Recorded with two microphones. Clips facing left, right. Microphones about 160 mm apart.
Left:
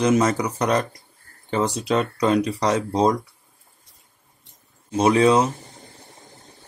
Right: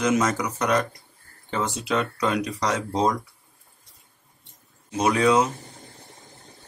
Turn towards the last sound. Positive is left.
turn(degrees=30)  # may be behind; listen again after turning